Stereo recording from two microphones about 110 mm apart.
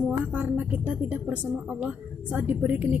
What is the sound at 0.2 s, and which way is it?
Speech, 15° right (ahead or behind).